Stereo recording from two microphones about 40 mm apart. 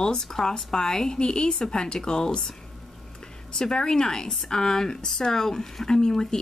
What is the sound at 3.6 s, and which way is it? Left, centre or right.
Speech, centre.